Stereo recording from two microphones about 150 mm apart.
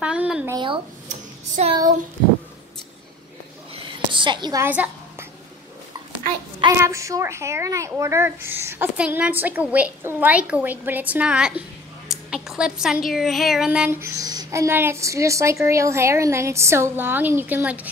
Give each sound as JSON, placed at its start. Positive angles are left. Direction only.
{"t": 0.0, "sound": "a sound", "side_deg": -5}
{"t": 0.5, "sound": "speech", "side_deg": -30}
{"t": 1.6, "sound": "speech", "side_deg": -50}
{"t": 3.7, "sound": "a sound", "side_deg": -35}
{"t": 4.6, "sound": "a woman's voice", "side_deg": -10}
{"t": 6.8, "sound": "speech", "side_deg": -20}